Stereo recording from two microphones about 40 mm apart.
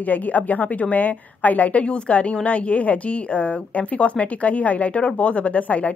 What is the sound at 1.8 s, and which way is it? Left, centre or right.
A woman's voice, left.